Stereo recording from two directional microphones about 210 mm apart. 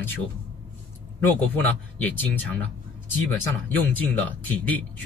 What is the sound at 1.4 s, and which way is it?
Speech, 10° left (ahead or behind).